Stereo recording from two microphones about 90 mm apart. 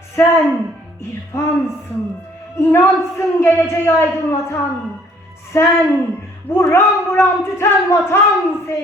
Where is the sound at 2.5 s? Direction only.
30° left (ahead or behind).